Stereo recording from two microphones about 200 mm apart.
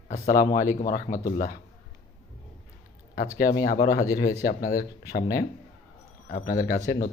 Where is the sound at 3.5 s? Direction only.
50° left (ahead or behind).